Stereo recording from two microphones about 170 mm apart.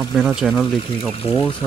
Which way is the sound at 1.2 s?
30° left (ahead or behind).